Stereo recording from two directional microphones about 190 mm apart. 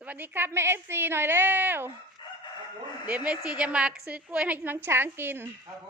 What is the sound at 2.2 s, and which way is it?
Chicken, 25° left (ahead or behind).